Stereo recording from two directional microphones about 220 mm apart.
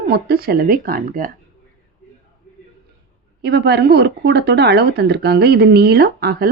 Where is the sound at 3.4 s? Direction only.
50° right (ahead or behind).